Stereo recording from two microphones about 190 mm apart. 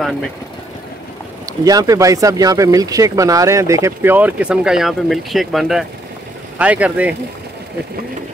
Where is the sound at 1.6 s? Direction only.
20° right (ahead or behind).